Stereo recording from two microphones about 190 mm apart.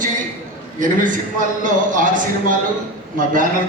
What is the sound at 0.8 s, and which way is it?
A man's voice, 45° right (ahead or behind).